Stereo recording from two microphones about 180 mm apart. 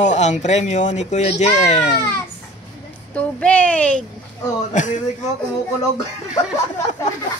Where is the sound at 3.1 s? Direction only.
5° left (ahead or behind).